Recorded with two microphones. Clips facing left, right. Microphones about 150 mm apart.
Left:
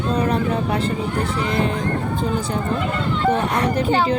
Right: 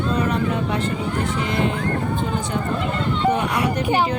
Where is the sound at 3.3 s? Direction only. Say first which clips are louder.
Left 2 dB; 10° right (ahead or behind).